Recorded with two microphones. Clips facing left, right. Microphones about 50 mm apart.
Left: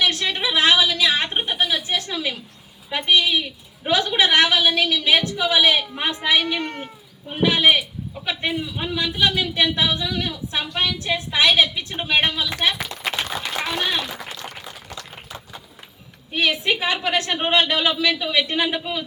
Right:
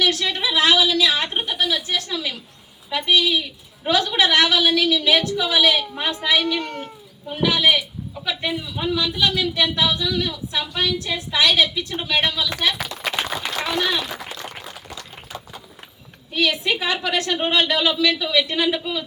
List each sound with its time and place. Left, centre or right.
0.0 s a sound: left
2.9 s a man's voice: left
13.6 s speech: centre
16.3 s a man's voice: left